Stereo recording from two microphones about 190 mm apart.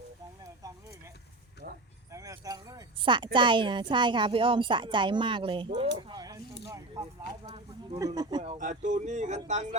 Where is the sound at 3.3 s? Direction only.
25° right (ahead or behind).